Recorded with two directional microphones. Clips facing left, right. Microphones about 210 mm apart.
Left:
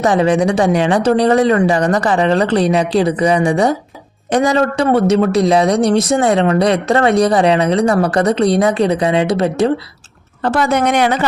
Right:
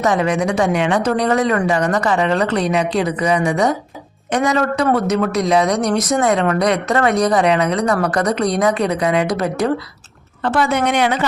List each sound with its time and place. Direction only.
0.0 s a man's voice: 30° left (ahead or behind)
10.4 s speech: 40° left (ahead or behind)